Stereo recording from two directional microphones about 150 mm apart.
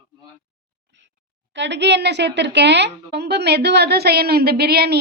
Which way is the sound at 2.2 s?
90° right.